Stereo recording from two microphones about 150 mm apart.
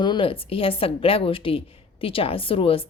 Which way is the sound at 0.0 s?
35° left (ahead or behind).